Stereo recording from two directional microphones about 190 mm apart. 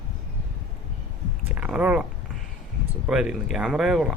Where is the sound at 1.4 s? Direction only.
5° right (ahead or behind).